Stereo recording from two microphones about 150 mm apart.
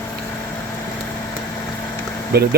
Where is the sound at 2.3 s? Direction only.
90° right.